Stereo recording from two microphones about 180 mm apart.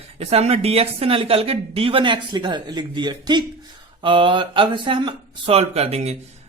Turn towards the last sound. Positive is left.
turn(degrees=-35)  # may be behind; listen again after turning